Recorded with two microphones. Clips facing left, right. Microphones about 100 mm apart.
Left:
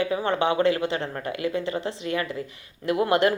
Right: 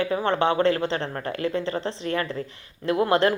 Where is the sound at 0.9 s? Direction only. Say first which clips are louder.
Right 1 dB; 30° right (ahead or behind).